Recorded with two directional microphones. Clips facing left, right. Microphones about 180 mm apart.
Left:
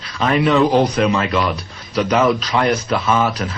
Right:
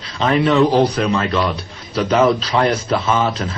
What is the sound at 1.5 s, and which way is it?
Speech, 30° right (ahead or behind).